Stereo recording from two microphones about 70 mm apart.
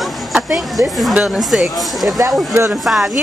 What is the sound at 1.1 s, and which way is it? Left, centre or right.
Speech, centre.